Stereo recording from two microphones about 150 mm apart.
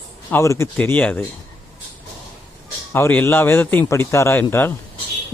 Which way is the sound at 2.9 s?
15° left (ahead or behind).